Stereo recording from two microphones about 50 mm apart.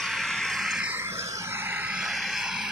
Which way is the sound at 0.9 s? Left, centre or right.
Right.